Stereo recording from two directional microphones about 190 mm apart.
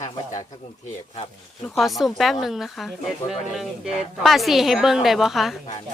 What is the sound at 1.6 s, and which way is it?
Speech, centre (ahead or behind).